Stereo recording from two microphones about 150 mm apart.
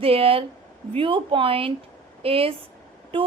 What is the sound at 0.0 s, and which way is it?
A woman's voice, 40° right (ahead or behind).